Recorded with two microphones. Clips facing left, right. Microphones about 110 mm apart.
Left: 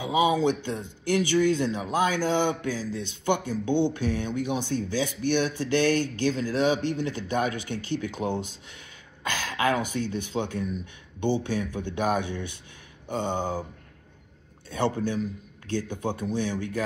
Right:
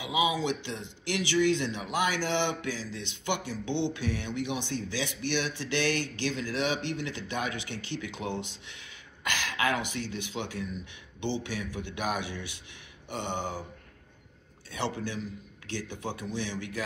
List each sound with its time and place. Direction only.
0.0 s speech: 45° left (ahead or behind)
10.3 s speech: 15° left (ahead or behind)
11.1 s speech: 50° left (ahead or behind)
13.1 s a sound: 40° left (ahead or behind)
14.7 s speech: 50° left (ahead or behind)